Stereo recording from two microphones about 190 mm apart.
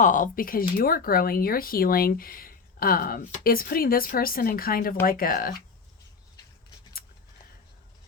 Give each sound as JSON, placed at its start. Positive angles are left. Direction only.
{"t": 0.0, "sound": "speech", "side_deg": 45}